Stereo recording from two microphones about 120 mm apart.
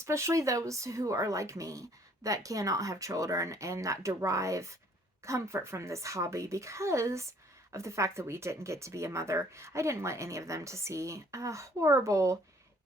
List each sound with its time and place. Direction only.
0.0 s speech: 25° right (ahead or behind)